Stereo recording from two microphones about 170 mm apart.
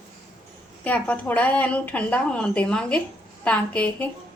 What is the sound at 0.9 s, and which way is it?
A woman's voice, 10° left (ahead or behind).